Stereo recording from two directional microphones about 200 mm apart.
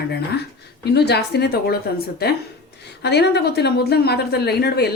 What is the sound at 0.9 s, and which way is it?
A woman's voice, 55° left (ahead or behind).